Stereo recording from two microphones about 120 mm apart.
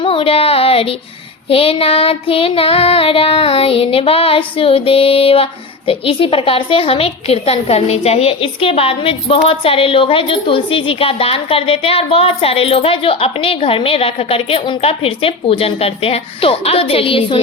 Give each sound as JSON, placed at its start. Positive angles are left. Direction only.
{"t": 0.0, "sound": "child singing", "side_deg": 50}